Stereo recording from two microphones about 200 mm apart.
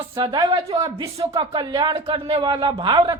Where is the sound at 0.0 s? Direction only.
25° right (ahead or behind).